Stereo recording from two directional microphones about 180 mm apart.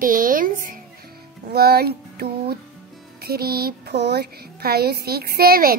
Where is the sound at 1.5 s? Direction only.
60° right (ahead or behind).